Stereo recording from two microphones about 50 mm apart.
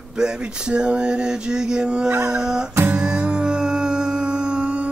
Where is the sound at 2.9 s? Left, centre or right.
Right.